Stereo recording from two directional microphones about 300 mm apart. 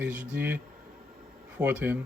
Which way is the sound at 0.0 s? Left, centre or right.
Centre.